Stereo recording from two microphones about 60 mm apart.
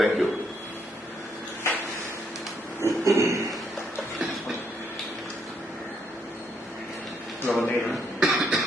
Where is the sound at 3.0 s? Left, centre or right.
Right.